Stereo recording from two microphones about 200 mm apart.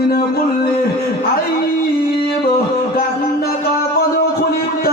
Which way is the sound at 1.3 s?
50° left (ahead or behind).